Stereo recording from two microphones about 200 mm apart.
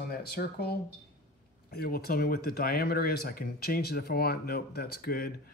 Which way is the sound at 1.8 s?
50° left (ahead or behind).